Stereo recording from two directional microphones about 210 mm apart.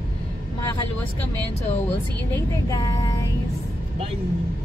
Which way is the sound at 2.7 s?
15° left (ahead or behind).